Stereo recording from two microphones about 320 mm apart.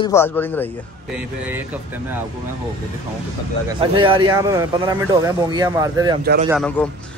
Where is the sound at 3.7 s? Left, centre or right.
Centre.